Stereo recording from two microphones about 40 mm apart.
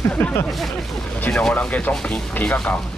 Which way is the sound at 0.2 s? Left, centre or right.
Left.